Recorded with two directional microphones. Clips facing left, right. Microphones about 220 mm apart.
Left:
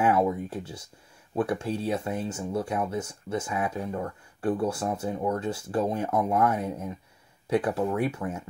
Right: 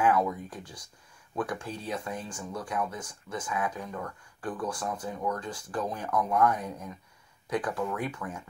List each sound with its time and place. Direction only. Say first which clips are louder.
0.0 s speech: left 3 dB; 25° left (ahead or behind)